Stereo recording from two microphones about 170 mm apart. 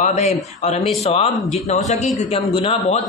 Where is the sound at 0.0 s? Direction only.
45° left (ahead or behind).